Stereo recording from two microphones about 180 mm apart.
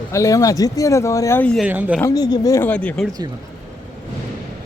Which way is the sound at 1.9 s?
15° left (ahead or behind).